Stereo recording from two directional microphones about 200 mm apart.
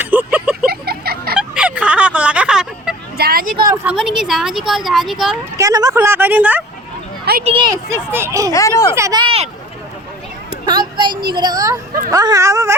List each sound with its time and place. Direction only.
0.0 s a sound: 10° right (ahead or behind)
0.7 s a sound: 50° right (ahead or behind)
1.4 s a sound: 5° right (ahead or behind)
3.2 s speech: 50° right (ahead or behind)
3.8 s speech: 5° right (ahead or behind)
5.5 s speech: 20° right (ahead or behind)
7.4 s speech: 25° right (ahead or behind)
8.5 s speech: 15° left (ahead or behind)
8.9 s speech: 15° right (ahead or behind)
10.7 s speech: 20° right (ahead or behind)